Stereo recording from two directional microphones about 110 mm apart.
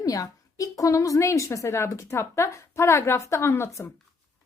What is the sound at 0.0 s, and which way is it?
Speech, 35° left (ahead or behind).